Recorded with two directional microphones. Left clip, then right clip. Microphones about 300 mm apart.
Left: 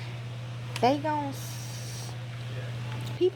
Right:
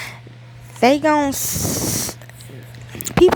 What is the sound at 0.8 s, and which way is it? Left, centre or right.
Speech, right.